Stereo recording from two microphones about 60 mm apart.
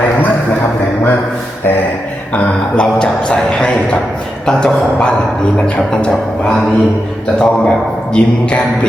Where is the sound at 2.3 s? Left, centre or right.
Left.